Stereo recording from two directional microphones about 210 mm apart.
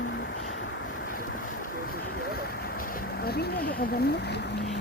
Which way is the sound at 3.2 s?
45° left (ahead or behind).